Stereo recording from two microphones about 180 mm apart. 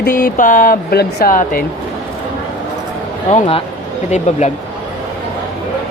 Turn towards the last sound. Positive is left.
turn(degrees=40)  # may be behind; listen again after turning